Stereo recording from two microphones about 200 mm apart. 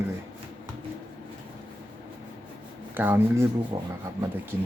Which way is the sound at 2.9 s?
10° right (ahead or behind).